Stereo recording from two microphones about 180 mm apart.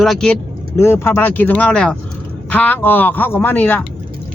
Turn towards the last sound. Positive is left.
turn(degrees=10)  # may be behind; listen again after turning